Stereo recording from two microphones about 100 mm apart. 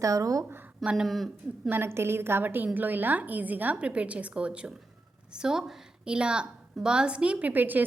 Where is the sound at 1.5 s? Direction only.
20° right (ahead or behind).